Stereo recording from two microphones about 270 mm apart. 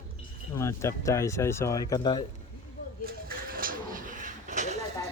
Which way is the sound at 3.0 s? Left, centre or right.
Right.